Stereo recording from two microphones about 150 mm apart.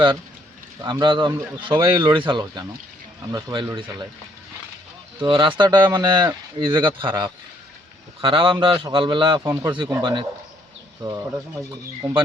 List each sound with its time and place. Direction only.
0.8 s speech: 30° right (ahead or behind)
5.2 s speech: 30° right (ahead or behind)
9.4 s speech: 20° right (ahead or behind)
9.7 s speech: 30° right (ahead or behind)